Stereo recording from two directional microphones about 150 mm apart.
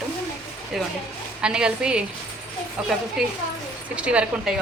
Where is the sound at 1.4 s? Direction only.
5° right (ahead or behind).